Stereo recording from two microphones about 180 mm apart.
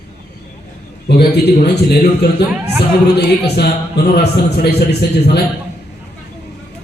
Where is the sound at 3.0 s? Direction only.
65° left (ahead or behind).